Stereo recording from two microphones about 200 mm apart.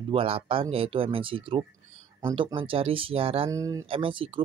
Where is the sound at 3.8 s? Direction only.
25° right (ahead or behind).